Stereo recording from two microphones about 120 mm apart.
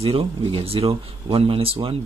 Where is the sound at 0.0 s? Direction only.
55° right (ahead or behind).